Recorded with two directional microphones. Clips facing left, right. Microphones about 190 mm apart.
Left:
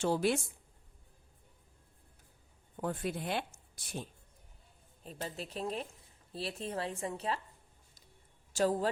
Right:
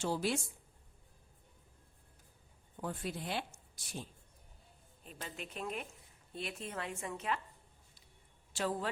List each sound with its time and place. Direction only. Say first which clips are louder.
0.0 s speech: left 5 dB; 55° left (ahead or behind)
2.8 s speech: left 4 dB; 60° left (ahead or behind)
5.0 s a woman's voice: left 5 dB; 35° left (ahead or behind)
8.5 s a woman's voice: left 6 dB; 40° left (ahead or behind)